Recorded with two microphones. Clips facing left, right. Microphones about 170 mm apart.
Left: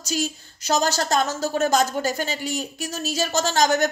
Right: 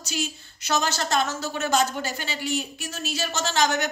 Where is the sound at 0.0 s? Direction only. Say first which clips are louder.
Left 4 dB; 40° left (ahead or behind).